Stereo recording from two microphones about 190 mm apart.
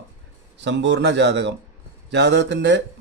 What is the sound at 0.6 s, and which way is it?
Speech, 65° right (ahead or behind).